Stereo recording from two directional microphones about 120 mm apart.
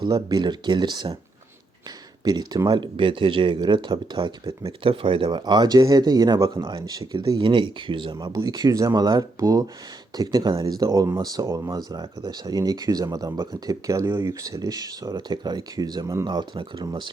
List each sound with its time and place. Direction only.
0.0 s speech: 35° right (ahead or behind)
2.2 s speech: 35° right (ahead or behind)